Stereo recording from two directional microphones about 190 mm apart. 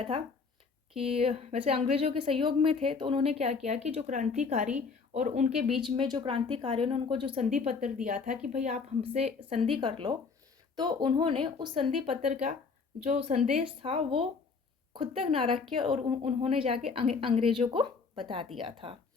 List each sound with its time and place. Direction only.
0.9 s a woman's voice: 30° right (ahead or behind)